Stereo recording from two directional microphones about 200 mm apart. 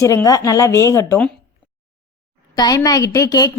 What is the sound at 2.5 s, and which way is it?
Speech, 20° left (ahead or behind).